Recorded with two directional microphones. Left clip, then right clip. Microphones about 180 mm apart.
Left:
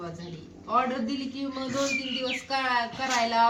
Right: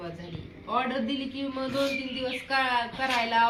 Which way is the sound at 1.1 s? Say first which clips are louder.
Right 1 dB; centre (ahead or behind).